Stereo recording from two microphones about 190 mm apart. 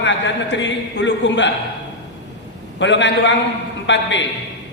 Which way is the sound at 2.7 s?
70° left (ahead or behind).